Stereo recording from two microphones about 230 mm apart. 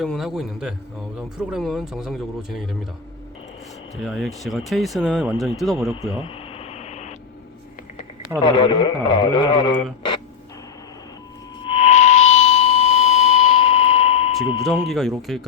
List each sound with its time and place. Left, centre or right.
0.0 s speech: centre
4.0 s speech: centre
5.9 s radio: left
8.4 s speech: left
11.6 s a sound: left
14.6 s speech: centre